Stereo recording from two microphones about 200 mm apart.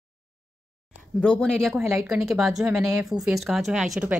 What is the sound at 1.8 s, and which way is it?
Speech, 10° right (ahead or behind).